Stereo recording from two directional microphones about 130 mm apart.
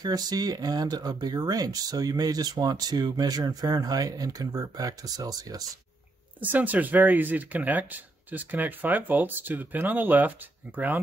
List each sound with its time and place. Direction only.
0.0 s speech: 30° right (ahead or behind)
6.4 s speech: 15° right (ahead or behind)